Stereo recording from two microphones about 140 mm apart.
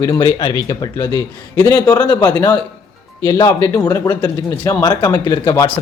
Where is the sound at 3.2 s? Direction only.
20° left (ahead or behind).